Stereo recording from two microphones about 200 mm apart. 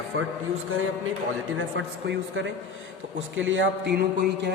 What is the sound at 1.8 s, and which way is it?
A man's voice, 65° right (ahead or behind).